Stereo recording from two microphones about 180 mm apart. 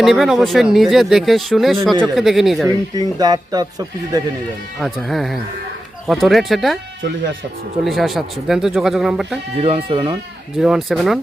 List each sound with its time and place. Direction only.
0.0 s speech: centre (ahead or behind)
2.6 s speech: 20° right (ahead or behind)
4.8 s speech: centre (ahead or behind)
7.9 s speech: centre (ahead or behind)
9.6 s speech: 35° right (ahead or behind)
10.6 s speech: centre (ahead or behind)